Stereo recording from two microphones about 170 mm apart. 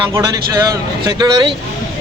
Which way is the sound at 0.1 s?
20° right (ahead or behind).